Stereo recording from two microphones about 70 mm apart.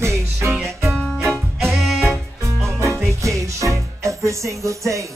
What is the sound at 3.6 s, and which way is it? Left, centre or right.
Music, right.